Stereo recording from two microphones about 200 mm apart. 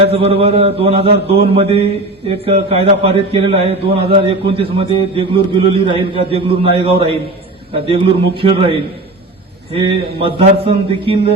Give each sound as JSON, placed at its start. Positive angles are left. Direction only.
{"t": 0.0, "sound": "a man's voice", "side_deg": -30}
{"t": 8.4, "sound": "a man's voice", "side_deg": -25}